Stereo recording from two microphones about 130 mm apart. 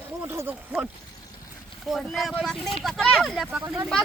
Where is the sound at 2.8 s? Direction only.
Centre (ahead or behind).